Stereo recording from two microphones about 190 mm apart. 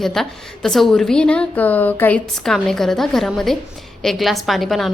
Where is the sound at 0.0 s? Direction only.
Centre (ahead or behind).